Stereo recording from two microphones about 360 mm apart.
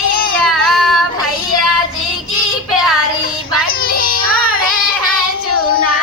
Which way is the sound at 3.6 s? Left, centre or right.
Left.